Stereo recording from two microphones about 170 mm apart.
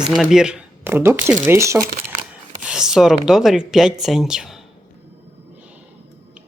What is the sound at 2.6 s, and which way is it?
Speech, 5° right (ahead or behind).